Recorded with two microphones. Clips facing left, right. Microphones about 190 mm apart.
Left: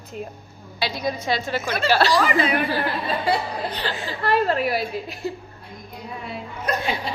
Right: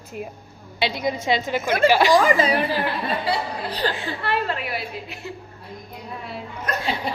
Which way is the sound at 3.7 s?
35° right (ahead or behind).